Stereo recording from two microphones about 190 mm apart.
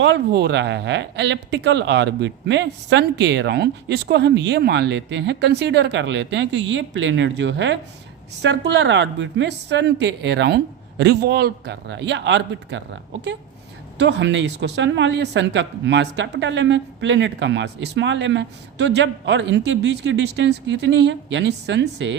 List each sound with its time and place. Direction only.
0.0 s speech: 65° right (ahead or behind)
14.0 s speech: 65° right (ahead or behind)